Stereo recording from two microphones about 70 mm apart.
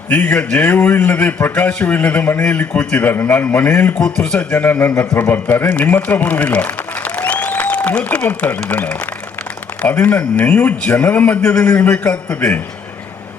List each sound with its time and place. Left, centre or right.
0.1 s a man's voice: left
3.9 s speech: centre
4.4 s a man's voice: left
10.0 s a man's voice: left